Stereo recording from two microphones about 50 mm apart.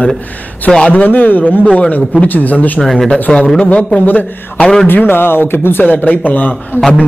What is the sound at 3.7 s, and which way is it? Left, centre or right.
Speech, left.